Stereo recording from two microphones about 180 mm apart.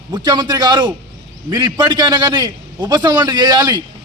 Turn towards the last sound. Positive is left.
turn(degrees=-25)  # may be behind; listen again after turning